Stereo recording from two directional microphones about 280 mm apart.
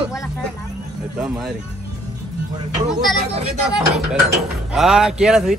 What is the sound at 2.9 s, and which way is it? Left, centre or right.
Speech, centre.